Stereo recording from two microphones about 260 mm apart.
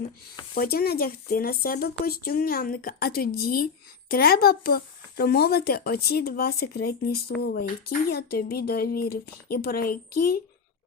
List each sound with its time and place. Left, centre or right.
0.5 s speech: left